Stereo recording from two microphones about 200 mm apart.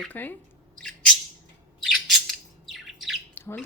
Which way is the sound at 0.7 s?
5° left (ahead or behind).